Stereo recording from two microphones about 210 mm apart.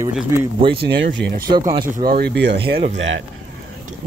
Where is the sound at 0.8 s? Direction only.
55° right (ahead or behind).